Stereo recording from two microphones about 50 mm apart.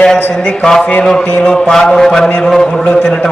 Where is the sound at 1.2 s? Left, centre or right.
Centre.